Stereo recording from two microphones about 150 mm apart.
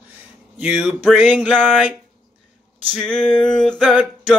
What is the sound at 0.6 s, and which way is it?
Speech, 5° right (ahead or behind).